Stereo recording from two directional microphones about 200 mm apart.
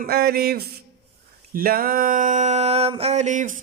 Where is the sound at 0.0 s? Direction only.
50° right (ahead or behind).